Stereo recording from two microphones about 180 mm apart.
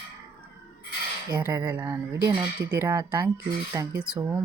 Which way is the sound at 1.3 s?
15° right (ahead or behind).